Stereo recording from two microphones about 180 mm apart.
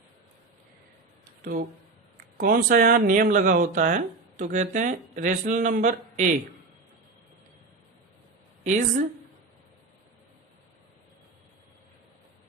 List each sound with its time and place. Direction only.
2.4 s speech: 50° right (ahead or behind)
8.6 s speech: 45° right (ahead or behind)